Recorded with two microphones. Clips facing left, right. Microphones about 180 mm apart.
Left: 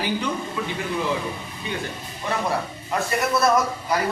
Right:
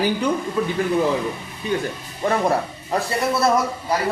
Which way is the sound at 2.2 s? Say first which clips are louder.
Right 6 dB; 50° right (ahead or behind).